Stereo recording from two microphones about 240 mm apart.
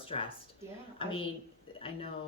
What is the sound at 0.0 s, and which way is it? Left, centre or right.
A woman's voice, left.